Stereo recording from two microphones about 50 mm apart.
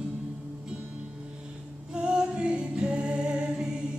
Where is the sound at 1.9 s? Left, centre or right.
Centre.